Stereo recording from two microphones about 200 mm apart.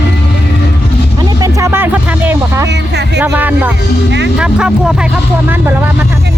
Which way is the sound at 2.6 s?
60° right (ahead or behind).